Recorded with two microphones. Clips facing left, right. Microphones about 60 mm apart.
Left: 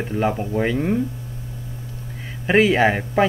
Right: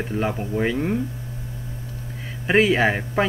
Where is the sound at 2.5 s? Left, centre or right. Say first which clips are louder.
Left 2 dB; centre.